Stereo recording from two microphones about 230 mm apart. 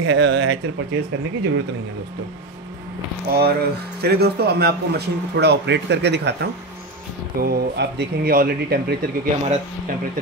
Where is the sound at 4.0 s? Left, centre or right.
Right.